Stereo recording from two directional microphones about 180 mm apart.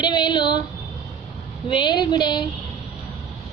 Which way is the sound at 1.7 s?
25° left (ahead or behind).